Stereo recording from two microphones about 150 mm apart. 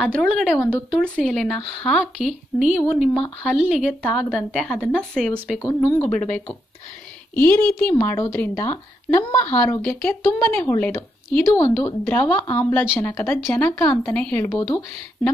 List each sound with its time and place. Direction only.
0.0 s a woman's voice: centre (ahead or behind)